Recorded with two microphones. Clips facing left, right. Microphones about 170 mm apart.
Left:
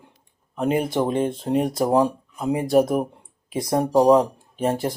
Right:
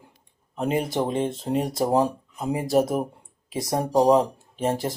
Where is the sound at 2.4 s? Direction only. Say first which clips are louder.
Left 3 dB; centre (ahead or behind).